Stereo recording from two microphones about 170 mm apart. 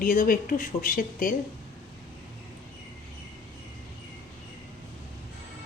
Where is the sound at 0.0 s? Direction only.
55° left (ahead or behind).